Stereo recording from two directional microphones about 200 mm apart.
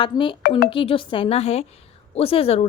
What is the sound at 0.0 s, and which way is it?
A woman's voice, 25° left (ahead or behind).